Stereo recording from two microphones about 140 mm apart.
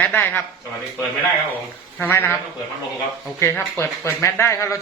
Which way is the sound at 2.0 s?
15° left (ahead or behind).